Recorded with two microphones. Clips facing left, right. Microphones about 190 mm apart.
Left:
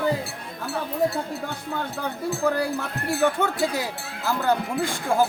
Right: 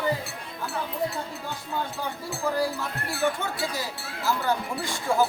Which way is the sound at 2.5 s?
60° left (ahead or behind).